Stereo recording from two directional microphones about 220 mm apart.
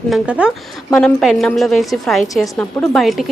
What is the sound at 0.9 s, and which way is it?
A woman's voice, 5° left (ahead or behind).